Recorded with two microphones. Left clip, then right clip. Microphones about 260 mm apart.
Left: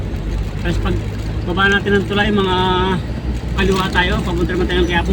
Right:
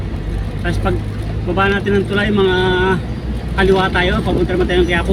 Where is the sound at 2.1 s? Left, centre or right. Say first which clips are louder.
Right 1 dB; centre.